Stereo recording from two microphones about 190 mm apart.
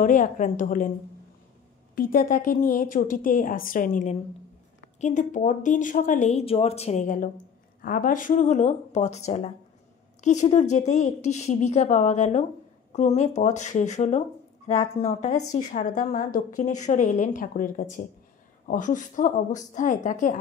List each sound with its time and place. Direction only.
0.0 s a woman's voice: 45° left (ahead or behind)
2.0 s a woman's voice: 50° left (ahead or behind)